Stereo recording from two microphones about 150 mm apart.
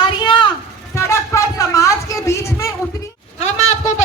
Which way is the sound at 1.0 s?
20° left (ahead or behind).